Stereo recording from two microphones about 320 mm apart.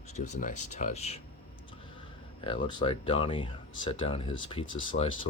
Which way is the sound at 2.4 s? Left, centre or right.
Centre.